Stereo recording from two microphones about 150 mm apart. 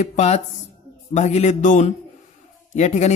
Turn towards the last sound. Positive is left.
turn(degrees=50)  # may be behind; listen again after turning